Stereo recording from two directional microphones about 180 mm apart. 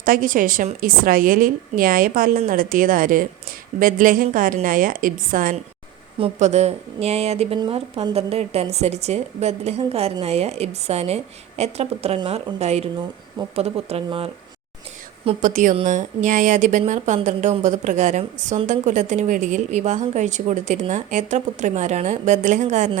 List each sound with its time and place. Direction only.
0.0 s a woman's voice: 50° right (ahead or behind)
6.1 s a woman's voice: 35° right (ahead or behind)
15.4 s a woman's voice: 45° right (ahead or behind)